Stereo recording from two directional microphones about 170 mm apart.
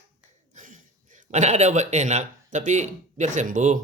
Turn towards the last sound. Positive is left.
turn(degrees=-50)  # may be behind; listen again after turning